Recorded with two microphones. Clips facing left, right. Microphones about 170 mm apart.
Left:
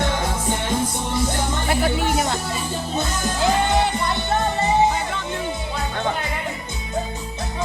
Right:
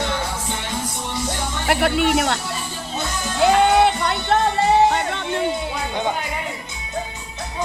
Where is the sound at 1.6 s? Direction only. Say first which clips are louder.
Right 4 dB; 70° right (ahead or behind).